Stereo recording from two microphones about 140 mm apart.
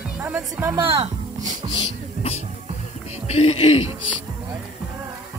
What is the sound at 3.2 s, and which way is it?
Speech, 50° left (ahead or behind).